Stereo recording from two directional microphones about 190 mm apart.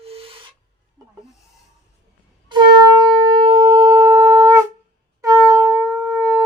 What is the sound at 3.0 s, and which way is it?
Wind instrument, 25° right (ahead or behind).